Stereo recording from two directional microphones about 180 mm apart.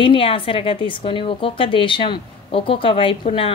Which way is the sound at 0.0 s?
30° left (ahead or behind).